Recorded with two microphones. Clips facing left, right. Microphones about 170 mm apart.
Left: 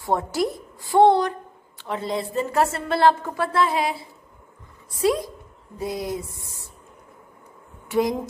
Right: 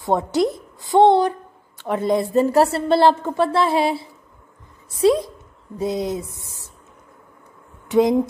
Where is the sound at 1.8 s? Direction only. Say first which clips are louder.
Right 7 dB; 50° right (ahead or behind); by 4.1 s 30° right (ahead or behind).